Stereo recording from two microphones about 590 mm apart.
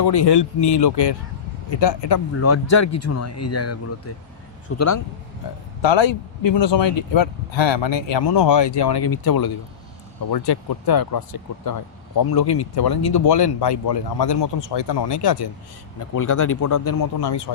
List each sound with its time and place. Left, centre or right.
0.0 s speech: left
2.3 s speech: left
5.8 s speech: left